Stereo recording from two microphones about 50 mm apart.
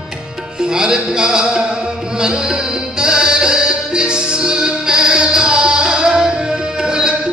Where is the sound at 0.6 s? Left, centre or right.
Centre.